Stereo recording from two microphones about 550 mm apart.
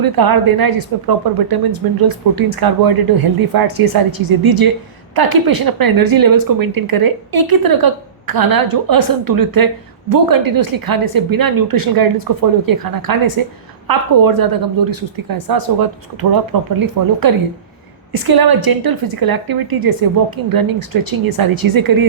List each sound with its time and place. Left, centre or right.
0.0 s speech: right